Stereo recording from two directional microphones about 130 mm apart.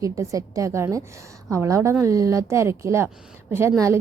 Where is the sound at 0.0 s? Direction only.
25° right (ahead or behind).